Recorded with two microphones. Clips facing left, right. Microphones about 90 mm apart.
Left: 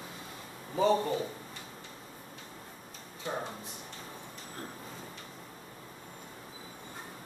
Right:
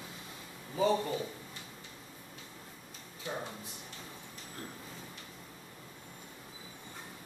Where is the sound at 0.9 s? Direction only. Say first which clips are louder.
Left 3 dB; 25° left (ahead or behind).